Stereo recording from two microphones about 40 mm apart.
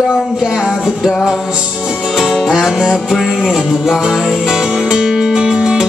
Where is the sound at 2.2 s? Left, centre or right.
Centre.